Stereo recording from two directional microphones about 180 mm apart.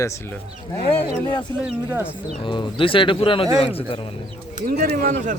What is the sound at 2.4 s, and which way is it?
A man's voice, 30° left (ahead or behind).